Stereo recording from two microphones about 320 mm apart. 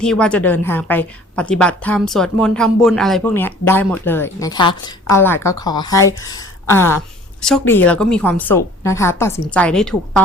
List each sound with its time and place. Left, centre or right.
0.0 s a woman's voice: centre